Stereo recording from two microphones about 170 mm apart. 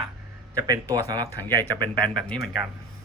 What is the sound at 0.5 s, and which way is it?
A man's voice, 20° right (ahead or behind).